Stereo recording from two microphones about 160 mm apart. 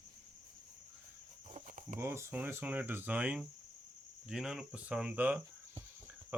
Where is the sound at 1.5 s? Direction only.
55° right (ahead or behind).